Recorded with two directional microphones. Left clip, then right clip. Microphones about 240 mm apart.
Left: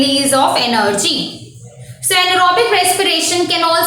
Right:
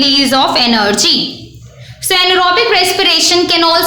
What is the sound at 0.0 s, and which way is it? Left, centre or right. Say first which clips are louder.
A woman's voice: right 3 dB; right.